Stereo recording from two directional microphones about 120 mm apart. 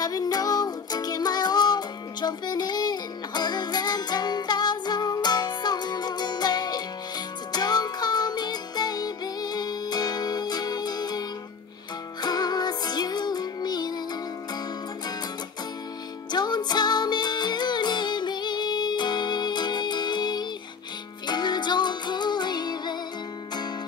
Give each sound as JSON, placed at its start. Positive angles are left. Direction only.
{"t": 0.0, "sound": "music", "side_deg": 30}
{"t": 16.3, "sound": "music", "side_deg": 35}